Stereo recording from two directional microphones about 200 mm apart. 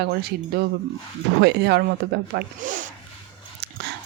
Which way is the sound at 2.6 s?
40° right (ahead or behind).